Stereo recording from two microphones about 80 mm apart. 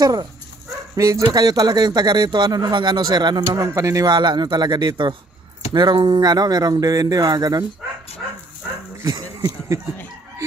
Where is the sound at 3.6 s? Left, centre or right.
Right.